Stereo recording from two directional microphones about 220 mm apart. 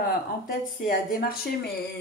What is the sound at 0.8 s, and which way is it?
Speech, 40° left (ahead or behind).